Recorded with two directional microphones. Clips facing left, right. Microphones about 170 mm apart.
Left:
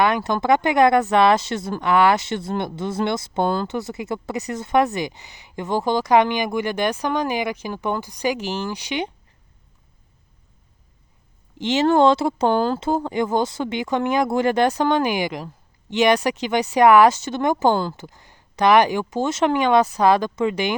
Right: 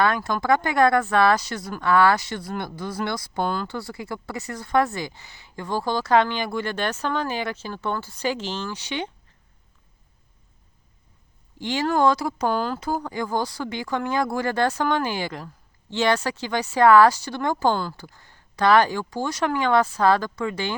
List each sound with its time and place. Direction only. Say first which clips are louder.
0.0 s speech: left 3 dB; 20° left (ahead or behind)
11.5 s speech: left 6 dB; 20° left (ahead or behind)